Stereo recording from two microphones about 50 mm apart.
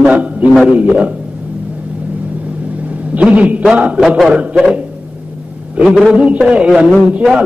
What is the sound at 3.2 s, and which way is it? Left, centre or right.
A man's voice, right.